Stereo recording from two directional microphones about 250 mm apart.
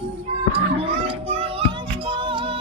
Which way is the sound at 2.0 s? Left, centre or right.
Centre.